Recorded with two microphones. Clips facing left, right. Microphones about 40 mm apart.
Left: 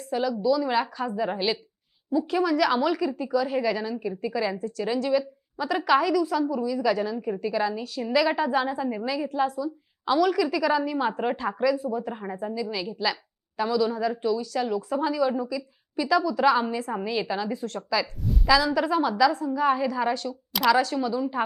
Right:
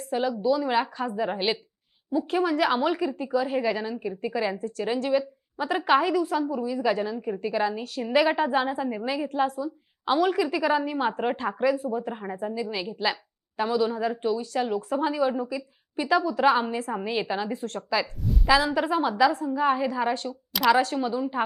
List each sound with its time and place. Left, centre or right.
0.0 s a woman's voice: right
8.0 s speech: centre
8.3 s a woman's voice: right
11.3 s a woman's voice: right
12.1 s speech: centre
12.7 s a woman's voice: right
18.0 s speech: centre
18.4 s a woman's voice: right
19.5 s a woman's voice: right
20.5 s speech: centre
20.9 s a woman's voice: right